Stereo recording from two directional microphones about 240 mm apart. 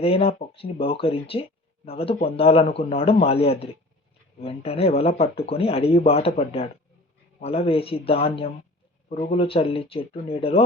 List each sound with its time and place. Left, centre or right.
0.0 s speech: left